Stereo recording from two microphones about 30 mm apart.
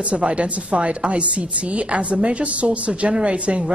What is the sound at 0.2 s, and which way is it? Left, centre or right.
A woman's voice, right.